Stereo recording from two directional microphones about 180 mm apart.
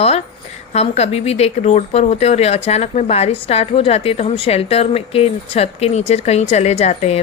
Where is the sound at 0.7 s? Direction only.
35° left (ahead or behind).